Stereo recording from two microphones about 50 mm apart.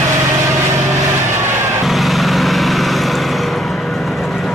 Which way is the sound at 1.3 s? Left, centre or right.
Right.